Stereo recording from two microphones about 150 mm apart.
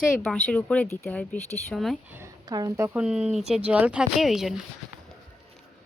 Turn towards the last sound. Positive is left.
turn(degrees=-5)  # may be behind; listen again after turning